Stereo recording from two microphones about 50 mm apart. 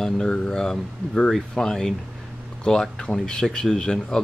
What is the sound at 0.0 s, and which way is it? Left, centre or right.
Speech, centre.